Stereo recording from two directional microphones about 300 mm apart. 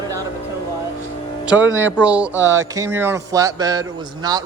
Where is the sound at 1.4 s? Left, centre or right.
Centre.